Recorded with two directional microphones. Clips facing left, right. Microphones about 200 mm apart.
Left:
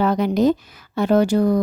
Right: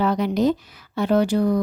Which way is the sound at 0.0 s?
45° left (ahead or behind).